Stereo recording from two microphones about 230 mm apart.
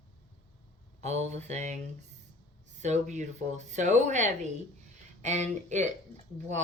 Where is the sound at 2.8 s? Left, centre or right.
Right.